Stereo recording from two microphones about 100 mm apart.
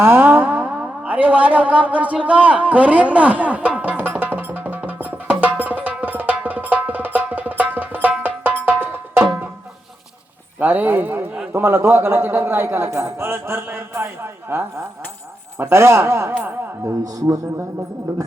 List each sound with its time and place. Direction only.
0.0 s music: 20° right (ahead or behind)
8.2 s percussion: 20° right (ahead or behind)
10.6 s a man's voice: 20° right (ahead or behind)